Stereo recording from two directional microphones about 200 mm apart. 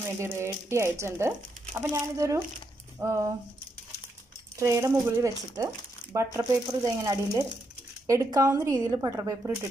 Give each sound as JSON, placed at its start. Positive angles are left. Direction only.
{"t": 0.2, "sound": "speech", "side_deg": -15}
{"t": 4.6, "sound": "speech", "side_deg": -15}